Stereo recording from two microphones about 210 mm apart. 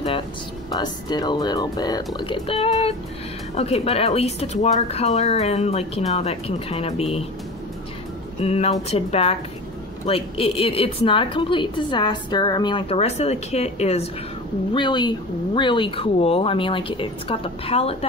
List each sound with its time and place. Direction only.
0.7 s a woman's voice: 20° left (ahead or behind)
8.4 s a woman's voice: 30° left (ahead or behind)